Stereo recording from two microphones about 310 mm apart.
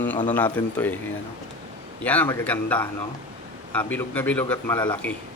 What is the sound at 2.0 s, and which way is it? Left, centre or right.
Speech, centre.